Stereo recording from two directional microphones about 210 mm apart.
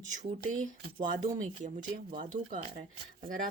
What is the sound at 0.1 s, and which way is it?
Speech, 35° right (ahead or behind).